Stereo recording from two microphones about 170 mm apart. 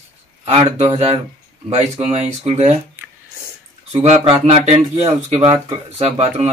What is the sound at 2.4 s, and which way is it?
Speech, 40° right (ahead or behind).